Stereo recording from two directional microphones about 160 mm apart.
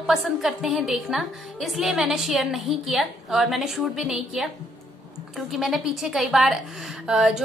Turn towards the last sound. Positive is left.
turn(degrees=-5)  # may be behind; listen again after turning